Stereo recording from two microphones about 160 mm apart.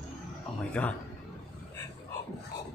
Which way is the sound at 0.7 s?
10° left (ahead or behind).